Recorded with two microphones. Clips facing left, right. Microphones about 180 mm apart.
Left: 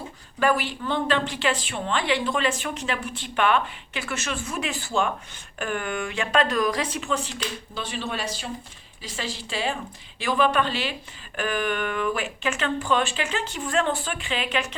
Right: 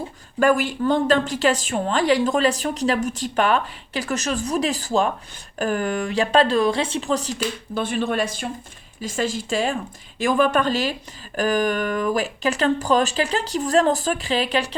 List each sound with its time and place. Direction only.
0.3 s a woman's voice: 45° right (ahead or behind)
7.7 s a woman's voice: 50° right (ahead or behind); by 14.8 s 35° right (ahead or behind)